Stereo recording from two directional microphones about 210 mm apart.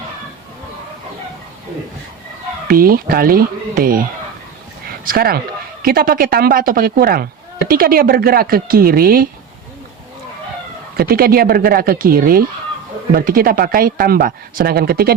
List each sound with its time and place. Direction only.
2.6 s speech: 45° right (ahead or behind)
10.9 s speech: 45° right (ahead or behind)